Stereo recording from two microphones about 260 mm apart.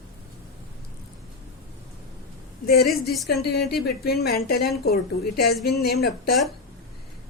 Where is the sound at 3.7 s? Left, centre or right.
Left.